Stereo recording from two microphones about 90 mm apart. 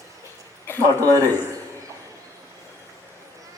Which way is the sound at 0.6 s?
25° left (ahead or behind).